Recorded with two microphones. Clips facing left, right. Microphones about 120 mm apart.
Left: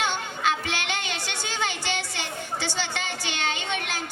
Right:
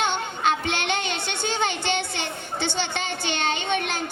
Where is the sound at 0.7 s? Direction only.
25° right (ahead or behind).